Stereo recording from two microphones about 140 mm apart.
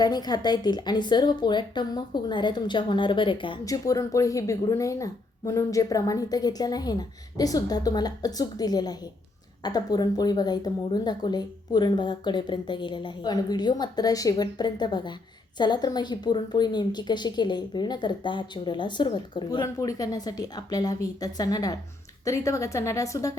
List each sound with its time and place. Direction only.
0.0 s speech: 30° left (ahead or behind)
3.7 s a woman's voice: 25° left (ahead or behind)